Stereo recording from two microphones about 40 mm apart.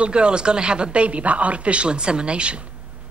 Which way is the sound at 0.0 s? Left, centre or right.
Right.